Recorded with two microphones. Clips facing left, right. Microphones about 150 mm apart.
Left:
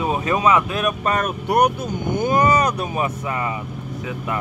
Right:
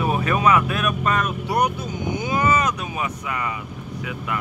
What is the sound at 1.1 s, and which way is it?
Speech, 50° left (ahead or behind).